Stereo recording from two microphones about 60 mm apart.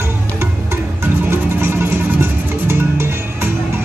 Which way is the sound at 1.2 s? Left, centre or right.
Right.